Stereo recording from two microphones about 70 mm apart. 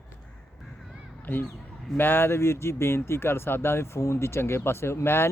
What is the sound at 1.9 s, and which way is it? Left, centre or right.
Speech, left.